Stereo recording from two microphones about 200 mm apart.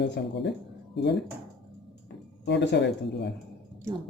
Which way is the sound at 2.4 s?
60° left (ahead or behind).